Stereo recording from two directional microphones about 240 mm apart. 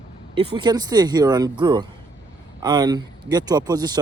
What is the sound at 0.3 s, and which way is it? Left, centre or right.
A man's voice, centre.